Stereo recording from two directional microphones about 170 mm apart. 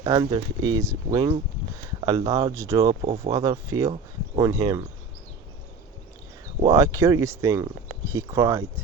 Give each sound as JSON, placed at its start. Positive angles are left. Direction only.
{"t": 0.0, "sound": "speech", "side_deg": -25}
{"t": 6.7, "sound": "speech", "side_deg": -20}